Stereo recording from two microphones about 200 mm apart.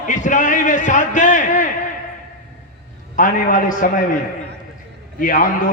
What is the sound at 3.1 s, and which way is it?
Speech, 40° left (ahead or behind).